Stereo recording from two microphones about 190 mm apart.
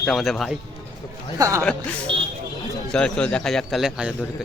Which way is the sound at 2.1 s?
25° right (ahead or behind).